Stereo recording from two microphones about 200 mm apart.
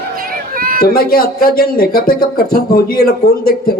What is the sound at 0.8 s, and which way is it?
Speech, 50° left (ahead or behind).